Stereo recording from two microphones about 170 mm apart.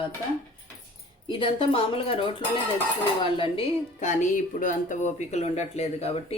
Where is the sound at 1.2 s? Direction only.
30° left (ahead or behind).